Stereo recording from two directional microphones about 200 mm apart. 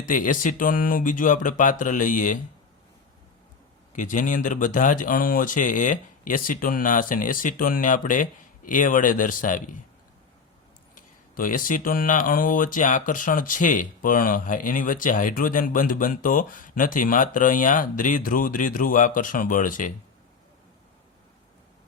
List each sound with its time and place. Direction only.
0.0 s speech: 40° left (ahead or behind)
3.9 s speech: 40° left (ahead or behind)
10.9 s speech: 45° left (ahead or behind)